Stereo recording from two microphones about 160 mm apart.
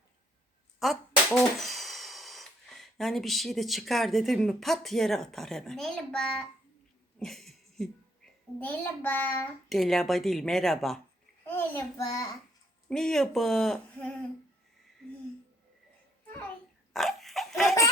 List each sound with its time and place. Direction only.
0.8 s a child's voice: centre (ahead or behind)
9.6 s speech: centre (ahead or behind)
11.4 s a child's voice: 15° left (ahead or behind)
12.9 s speech: 5° left (ahead or behind)
16.9 s laughter: centre (ahead or behind)